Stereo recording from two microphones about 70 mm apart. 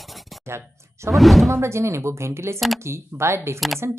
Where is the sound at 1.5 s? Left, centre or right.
Right.